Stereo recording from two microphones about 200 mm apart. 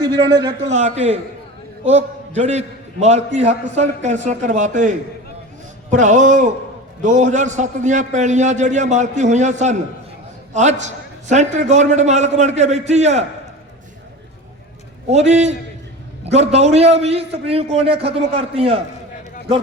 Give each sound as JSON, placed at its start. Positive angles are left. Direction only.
{"t": 0.0, "sound": "a man's voice", "side_deg": -25}
{"t": 15.1, "sound": "a man's voice", "side_deg": -35}